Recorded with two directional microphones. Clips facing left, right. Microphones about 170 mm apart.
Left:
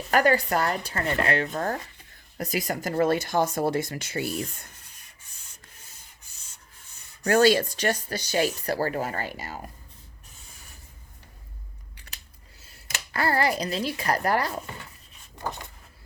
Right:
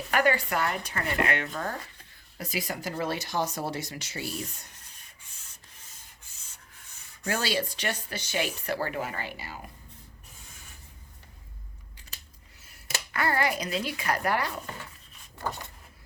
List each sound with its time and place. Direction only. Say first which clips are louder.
0.1 s speech: left 4 dB; 40° left (ahead or behind)
7.2 s speech: left 10 dB; 50° left (ahead or behind)
12.6 s speech: right 2 dB; 30° left (ahead or behind)
15.4 s a sound: left 1 dB; 15° left (ahead or behind)